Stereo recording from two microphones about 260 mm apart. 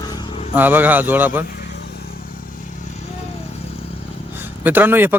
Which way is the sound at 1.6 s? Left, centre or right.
Left.